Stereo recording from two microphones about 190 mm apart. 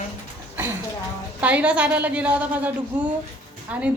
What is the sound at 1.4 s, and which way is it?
A woman's voice, 5° right (ahead or behind).